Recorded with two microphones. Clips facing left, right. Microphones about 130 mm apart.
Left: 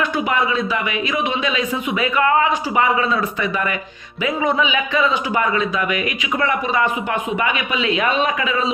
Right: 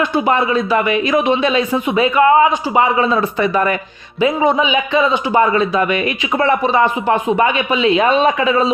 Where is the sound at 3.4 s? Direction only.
40° right (ahead or behind).